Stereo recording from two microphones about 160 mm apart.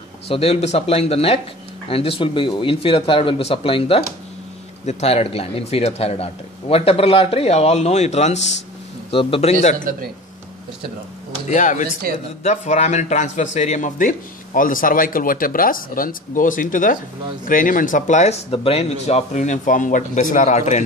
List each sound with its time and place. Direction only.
0.3 s speech: 40° left (ahead or behind)
11.4 s speech: 50° left (ahead or behind)